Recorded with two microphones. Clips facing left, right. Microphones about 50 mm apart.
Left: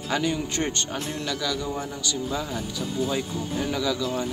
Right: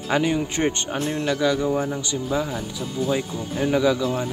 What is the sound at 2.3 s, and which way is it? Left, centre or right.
Speech, centre.